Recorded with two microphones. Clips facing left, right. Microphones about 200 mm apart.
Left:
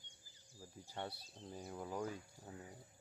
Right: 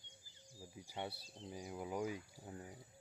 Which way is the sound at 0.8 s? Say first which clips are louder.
Right 1 dB; 10° right (ahead or behind).